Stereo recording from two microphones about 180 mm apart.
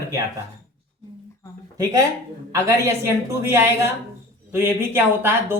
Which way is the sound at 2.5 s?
15° right (ahead or behind).